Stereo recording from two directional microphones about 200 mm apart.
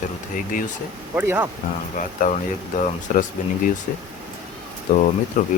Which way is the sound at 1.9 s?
40° left (ahead or behind).